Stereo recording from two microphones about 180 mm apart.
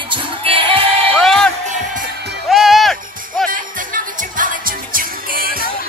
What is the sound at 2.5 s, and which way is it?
Music, centre (ahead or behind).